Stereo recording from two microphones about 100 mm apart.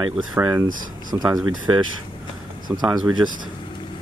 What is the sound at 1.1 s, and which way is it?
Speech, 45° right (ahead or behind).